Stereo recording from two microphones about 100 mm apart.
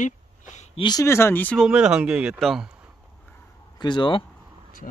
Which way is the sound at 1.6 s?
10° right (ahead or behind).